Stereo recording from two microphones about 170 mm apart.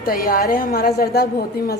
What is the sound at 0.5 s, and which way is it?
A woman's voice, 55° left (ahead or behind).